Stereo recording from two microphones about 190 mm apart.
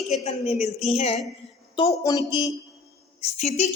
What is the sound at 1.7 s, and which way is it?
Speech, 20° left (ahead or behind).